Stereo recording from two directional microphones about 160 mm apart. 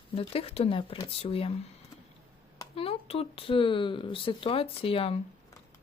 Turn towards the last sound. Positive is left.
turn(degrees=35)  # may be behind; listen again after turning